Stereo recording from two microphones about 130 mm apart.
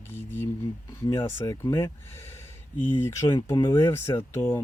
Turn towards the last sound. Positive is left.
turn(degrees=20)  # may be behind; listen again after turning